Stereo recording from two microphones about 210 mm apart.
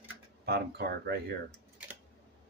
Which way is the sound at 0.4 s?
50° right (ahead or behind).